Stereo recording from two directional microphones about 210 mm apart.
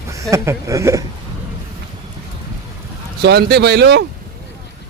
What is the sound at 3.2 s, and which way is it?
Speech, 50° right (ahead or behind).